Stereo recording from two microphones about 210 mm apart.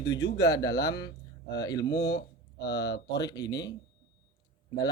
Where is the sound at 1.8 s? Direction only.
55° left (ahead or behind).